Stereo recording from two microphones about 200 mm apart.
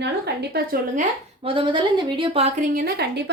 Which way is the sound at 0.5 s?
45° right (ahead or behind).